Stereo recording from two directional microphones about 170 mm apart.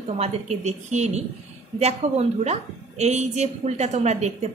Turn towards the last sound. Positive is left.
turn(degrees=-40)  # may be behind; listen again after turning